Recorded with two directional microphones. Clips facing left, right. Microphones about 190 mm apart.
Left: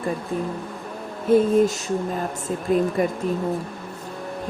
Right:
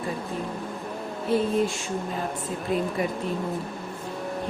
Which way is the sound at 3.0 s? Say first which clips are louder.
Left 5 dB; 45° left (ahead or behind).